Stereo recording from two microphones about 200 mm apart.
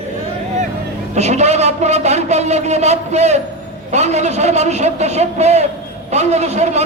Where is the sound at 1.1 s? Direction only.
35° right (ahead or behind).